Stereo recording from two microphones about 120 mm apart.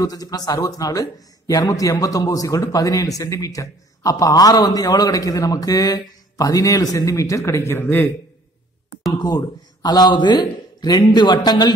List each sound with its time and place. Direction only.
0.0 s a man's voice: 30° left (ahead or behind); by 8.1 s 15° left (ahead or behind)
9.2 s a man's voice: 35° left (ahead or behind)